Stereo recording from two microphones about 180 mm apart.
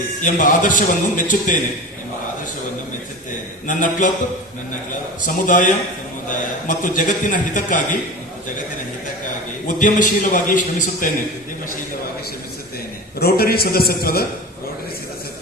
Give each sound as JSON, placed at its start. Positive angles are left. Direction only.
{"t": 0.2, "sound": "a man's voice", "side_deg": 45}
{"t": 3.7, "sound": "a man's voice", "side_deg": 45}
{"t": 5.2, "sound": "a man's voice", "side_deg": 45}
{"t": 9.6, "sound": "a man's voice", "side_deg": 45}
{"t": 13.1, "sound": "a man's voice", "side_deg": 60}